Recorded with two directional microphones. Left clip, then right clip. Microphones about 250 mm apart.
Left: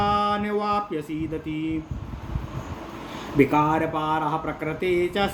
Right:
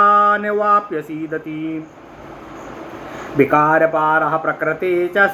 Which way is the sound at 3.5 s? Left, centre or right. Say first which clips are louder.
Right 9 dB; left.